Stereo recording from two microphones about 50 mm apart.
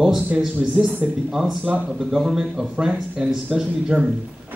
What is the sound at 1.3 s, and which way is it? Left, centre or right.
Speech, centre.